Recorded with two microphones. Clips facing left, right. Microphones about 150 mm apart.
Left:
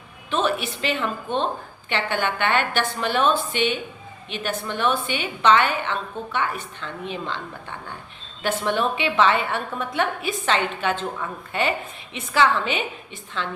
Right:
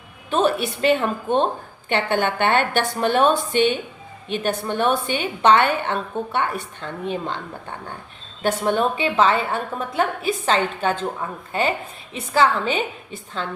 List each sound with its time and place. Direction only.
0.3 s a woman's voice: 50° right (ahead or behind)